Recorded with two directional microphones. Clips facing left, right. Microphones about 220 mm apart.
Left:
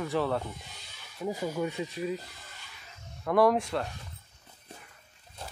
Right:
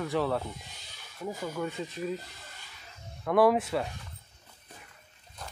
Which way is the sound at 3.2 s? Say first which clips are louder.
Right 1 dB; centre (ahead or behind).